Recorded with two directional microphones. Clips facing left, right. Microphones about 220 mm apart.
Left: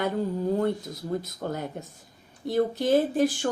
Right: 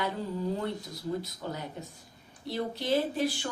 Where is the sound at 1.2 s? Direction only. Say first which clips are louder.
Left 6 dB; 50° left (ahead or behind).